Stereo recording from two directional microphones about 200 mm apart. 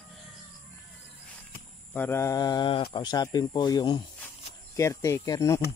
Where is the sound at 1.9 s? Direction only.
10° left (ahead or behind).